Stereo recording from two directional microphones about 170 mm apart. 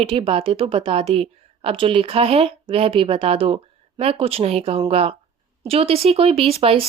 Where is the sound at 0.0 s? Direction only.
35° right (ahead or behind).